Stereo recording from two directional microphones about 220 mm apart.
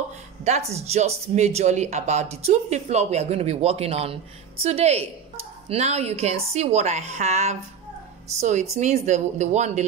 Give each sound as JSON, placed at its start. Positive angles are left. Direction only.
{"t": 0.4, "sound": "a woman's voice", "side_deg": -30}